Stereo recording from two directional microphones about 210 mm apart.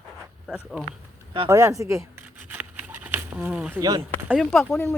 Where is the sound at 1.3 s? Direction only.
20° right (ahead or behind).